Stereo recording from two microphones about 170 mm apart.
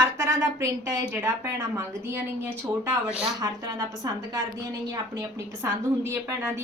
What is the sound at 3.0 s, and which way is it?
Speech, 5° right (ahead or behind).